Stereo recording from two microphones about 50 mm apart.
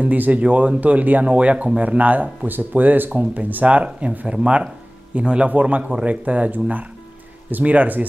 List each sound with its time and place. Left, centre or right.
0.0 s speech: right